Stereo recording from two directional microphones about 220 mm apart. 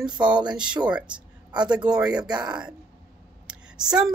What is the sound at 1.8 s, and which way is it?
A woman's voice, 5° right (ahead or behind).